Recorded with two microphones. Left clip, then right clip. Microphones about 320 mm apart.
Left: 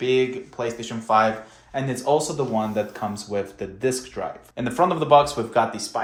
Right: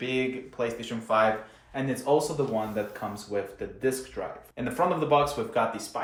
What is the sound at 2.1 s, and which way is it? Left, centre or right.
Speech, left.